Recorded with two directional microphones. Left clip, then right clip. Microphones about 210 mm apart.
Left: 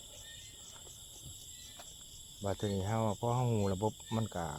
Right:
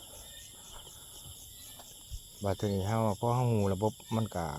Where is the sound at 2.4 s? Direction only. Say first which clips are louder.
Right 4 dB; 20° right (ahead or behind).